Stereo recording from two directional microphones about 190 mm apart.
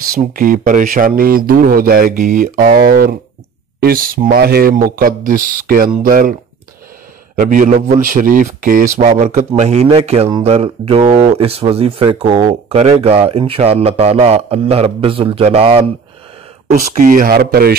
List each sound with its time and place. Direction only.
0.4 s speech: 45° right (ahead or behind)
7.3 s speech: 45° right (ahead or behind)
16.7 s speech: 45° right (ahead or behind)